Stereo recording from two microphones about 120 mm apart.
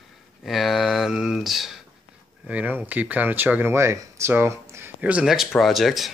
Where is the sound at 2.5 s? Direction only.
15° right (ahead or behind).